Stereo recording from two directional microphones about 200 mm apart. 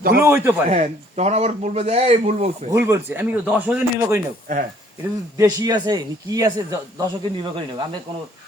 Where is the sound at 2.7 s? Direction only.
10° right (ahead or behind).